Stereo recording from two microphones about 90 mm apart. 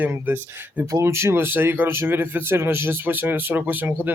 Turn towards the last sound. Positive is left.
turn(degrees=-20)  # may be behind; listen again after turning